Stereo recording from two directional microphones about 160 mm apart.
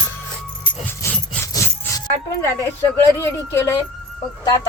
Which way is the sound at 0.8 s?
20° left (ahead or behind).